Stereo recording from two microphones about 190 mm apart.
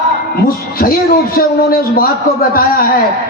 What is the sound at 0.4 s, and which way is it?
A man's voice, 50° left (ahead or behind).